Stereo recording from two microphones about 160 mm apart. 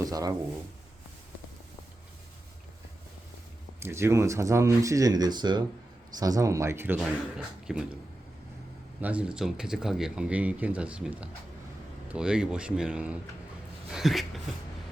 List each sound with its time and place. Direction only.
0.0 s speech: 20° right (ahead or behind)
3.8 s speech: 15° right (ahead or behind)
9.0 s speech: 10° right (ahead or behind)